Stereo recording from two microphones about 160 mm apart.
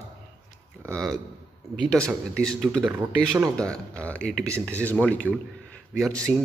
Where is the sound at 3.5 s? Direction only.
5° left (ahead or behind).